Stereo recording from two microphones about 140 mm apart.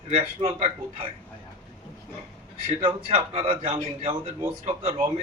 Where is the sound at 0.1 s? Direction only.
45° right (ahead or behind).